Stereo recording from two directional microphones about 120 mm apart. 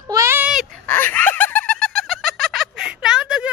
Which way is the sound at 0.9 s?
15° left (ahead or behind).